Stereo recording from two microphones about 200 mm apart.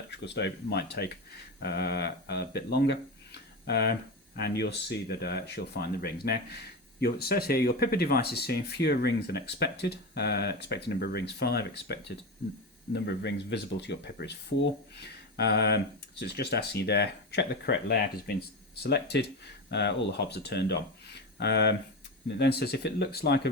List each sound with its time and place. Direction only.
0.1 s speech: 60° left (ahead or behind)